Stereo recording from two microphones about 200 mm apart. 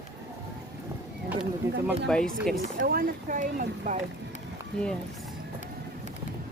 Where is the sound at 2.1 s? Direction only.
5° left (ahead or behind).